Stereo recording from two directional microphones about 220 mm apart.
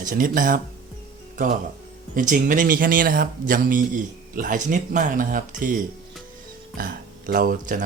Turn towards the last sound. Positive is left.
turn(degrees=-40)  # may be behind; listen again after turning